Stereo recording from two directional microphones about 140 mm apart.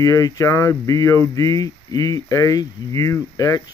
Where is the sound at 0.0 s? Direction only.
25° left (ahead or behind).